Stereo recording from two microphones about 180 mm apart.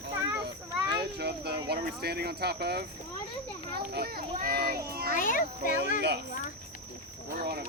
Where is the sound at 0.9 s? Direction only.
65° right (ahead or behind).